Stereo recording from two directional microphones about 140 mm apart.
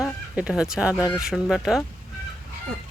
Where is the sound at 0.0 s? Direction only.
5° right (ahead or behind).